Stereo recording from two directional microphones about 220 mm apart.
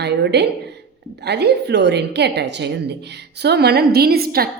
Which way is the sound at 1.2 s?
50° right (ahead or behind).